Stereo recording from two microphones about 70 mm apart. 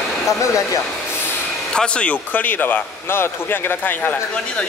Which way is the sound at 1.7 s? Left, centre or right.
Centre.